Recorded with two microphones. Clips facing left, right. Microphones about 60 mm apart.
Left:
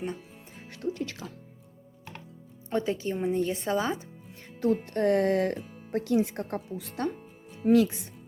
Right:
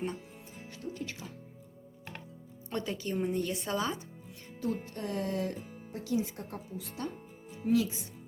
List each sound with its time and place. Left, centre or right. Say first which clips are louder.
0.6 s music: left 8 dB; left
2.6 s a woman's voice: left 6 dB; left
4.9 s speech: left 10 dB; left